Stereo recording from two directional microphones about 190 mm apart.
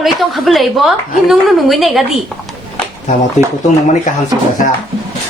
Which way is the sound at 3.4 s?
35° left (ahead or behind).